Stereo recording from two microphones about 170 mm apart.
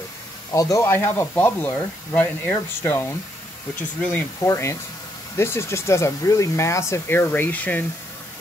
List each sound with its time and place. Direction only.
0.5 s speech: 20° left (ahead or behind)